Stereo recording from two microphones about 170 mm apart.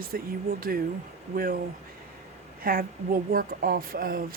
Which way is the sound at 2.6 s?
60° right (ahead or behind).